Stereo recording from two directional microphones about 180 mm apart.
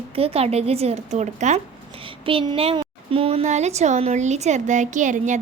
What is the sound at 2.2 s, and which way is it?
A child's voice, 25° right (ahead or behind).